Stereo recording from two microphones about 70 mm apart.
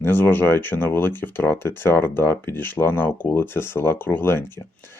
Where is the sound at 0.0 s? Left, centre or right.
Left.